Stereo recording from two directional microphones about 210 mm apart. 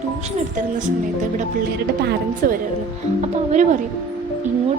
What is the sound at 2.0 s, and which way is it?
Speech, 45° right (ahead or behind).